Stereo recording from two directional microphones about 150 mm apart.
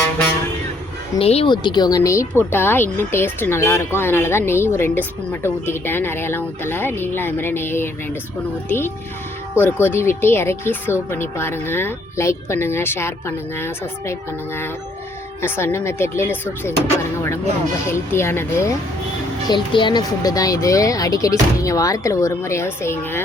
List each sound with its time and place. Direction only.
1.2 s speech: 40° left (ahead or behind); by 16.7 s 15° left (ahead or behind)
17.8 s speech: 15° left (ahead or behind)
19.5 s speech: 30° left (ahead or behind); by 23.2 s 15° left (ahead or behind)